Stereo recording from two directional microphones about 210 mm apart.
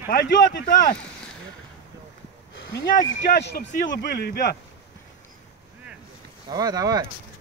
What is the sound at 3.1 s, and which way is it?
Speech, 50° left (ahead or behind).